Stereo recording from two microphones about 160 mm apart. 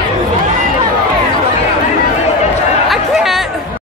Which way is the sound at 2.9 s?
Centre (ahead or behind).